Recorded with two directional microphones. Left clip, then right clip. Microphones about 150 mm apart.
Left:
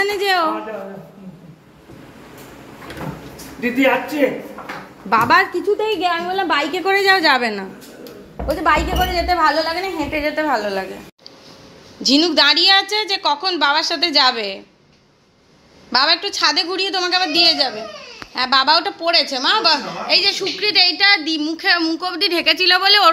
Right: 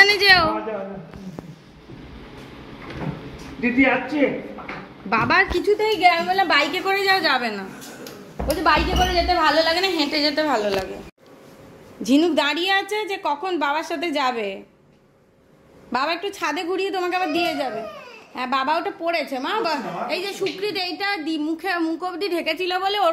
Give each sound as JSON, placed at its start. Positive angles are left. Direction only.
{"t": 0.0, "sound": "a sound", "side_deg": 25}
{"t": 5.1, "sound": "a woman's voice", "side_deg": 25}
{"t": 8.5, "sound": "speech", "side_deg": 10}
{"t": 8.9, "sound": "a woman's voice", "side_deg": 25}
{"t": 9.6, "sound": "a woman's voice", "side_deg": 0}
{"t": 12.2, "sound": "a woman's voice", "side_deg": -15}
{"t": 15.9, "sound": "a woman's voice", "side_deg": -10}